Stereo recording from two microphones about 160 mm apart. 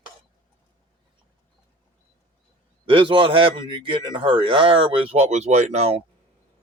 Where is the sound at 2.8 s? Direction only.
35° right (ahead or behind).